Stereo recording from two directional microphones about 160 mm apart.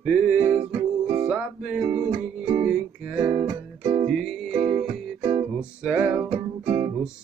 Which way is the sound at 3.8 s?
20° right (ahead or behind).